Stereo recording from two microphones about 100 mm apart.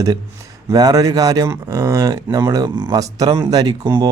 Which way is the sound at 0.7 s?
40° right (ahead or behind).